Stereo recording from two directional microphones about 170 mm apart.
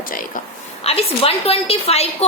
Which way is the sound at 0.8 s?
35° left (ahead or behind).